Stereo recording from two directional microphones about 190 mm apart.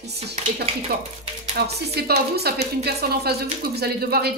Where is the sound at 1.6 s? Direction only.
55° right (ahead or behind).